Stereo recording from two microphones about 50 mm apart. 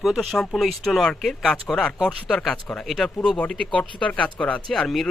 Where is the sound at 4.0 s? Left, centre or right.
Left.